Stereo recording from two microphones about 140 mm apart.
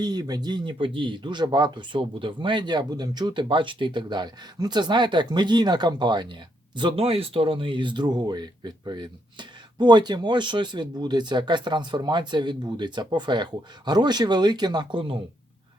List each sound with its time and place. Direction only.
0.0 s speech: 30° right (ahead or behind)